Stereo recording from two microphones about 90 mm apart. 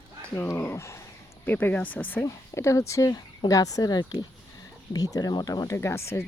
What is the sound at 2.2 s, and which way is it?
Speech, 30° left (ahead or behind).